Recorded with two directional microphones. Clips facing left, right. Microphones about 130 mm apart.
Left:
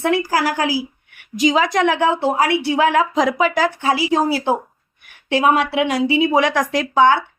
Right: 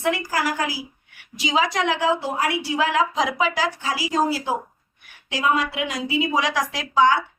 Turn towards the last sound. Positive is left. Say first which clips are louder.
# left 4 dB
turn(degrees=55)  # may be behind; listen again after turning